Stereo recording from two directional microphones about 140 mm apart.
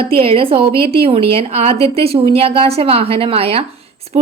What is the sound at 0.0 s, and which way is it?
A woman's voice, 40° right (ahead or behind).